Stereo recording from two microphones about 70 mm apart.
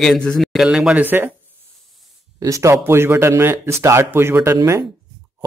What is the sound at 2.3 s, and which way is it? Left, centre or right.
Speech, right.